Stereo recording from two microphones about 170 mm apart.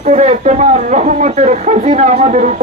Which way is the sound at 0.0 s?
45° right (ahead or behind).